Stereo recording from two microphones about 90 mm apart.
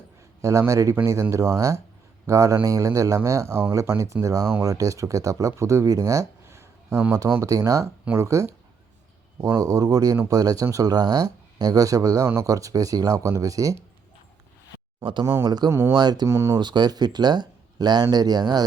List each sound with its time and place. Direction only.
0.6 s speech: 35° right (ahead or behind)
9.5 s speech: 40° right (ahead or behind)
15.4 s speech: 50° right (ahead or behind)
15.7 s speech: 30° right (ahead or behind)
16.0 s speech: 50° right (ahead or behind)
16.3 s speech: 35° right (ahead or behind)
16.6 s speech: 55° right (ahead or behind)